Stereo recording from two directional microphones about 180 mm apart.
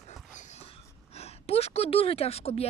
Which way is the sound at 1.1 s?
35° left (ahead or behind).